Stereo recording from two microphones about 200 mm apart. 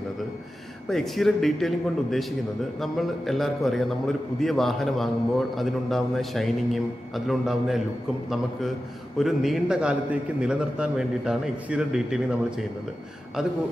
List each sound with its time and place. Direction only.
0.8 s a man's voice: centre (ahead or behind)
9.2 s a man's voice: centre (ahead or behind)